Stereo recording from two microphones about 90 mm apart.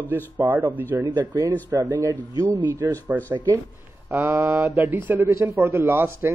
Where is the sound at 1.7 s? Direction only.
35° right (ahead or behind).